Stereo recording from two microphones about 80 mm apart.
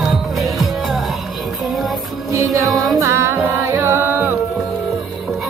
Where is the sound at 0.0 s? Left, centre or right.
Centre.